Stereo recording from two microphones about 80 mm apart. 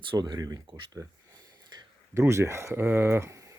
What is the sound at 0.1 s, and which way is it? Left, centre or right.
Speech, right.